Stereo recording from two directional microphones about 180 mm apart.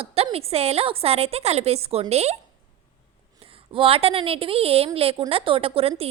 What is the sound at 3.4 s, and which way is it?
Speech, 30° right (ahead or behind).